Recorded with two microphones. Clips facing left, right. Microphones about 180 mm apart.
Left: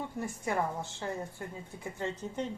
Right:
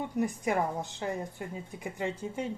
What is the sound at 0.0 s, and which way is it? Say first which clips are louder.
A woman's voice: right 6 dB; 15° right (ahead or behind).